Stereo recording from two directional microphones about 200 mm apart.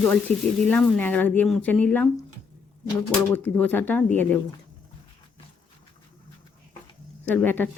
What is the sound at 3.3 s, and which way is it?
Speech, 10° left (ahead or behind).